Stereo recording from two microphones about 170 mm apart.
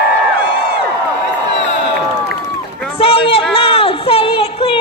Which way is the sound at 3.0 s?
35° left (ahead or behind).